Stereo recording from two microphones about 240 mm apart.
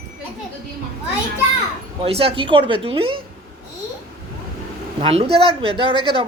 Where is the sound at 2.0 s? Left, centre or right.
Right.